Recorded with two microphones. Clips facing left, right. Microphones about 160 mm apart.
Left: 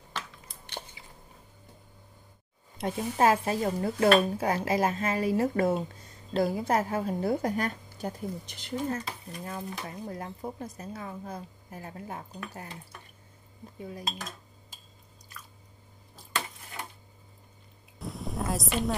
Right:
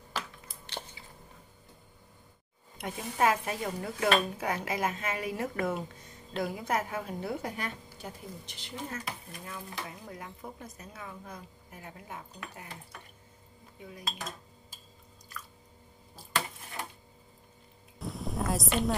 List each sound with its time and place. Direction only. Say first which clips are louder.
2.8 s speech: left 4 dB; 35° left (ahead or behind)
13.7 s cutlery: left 6 dB; 35° left (ahead or behind)
17.9 s a sound: even; centre (ahead or behind)